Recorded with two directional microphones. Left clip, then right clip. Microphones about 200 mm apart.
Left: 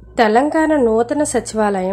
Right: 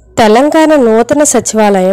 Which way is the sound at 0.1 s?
35° right (ahead or behind).